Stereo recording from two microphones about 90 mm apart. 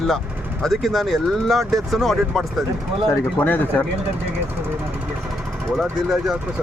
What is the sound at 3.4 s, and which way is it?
Speech, 20° left (ahead or behind).